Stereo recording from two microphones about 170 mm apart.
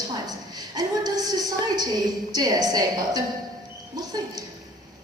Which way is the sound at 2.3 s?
20° right (ahead or behind).